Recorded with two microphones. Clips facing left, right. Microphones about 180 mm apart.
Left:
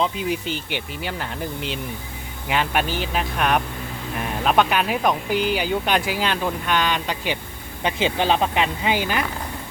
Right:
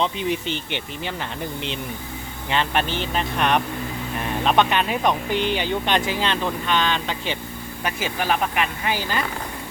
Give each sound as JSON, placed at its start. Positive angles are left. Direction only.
{"t": 0.0, "sound": "speech", "side_deg": 5}
{"t": 7.9, "sound": "speech", "side_deg": 25}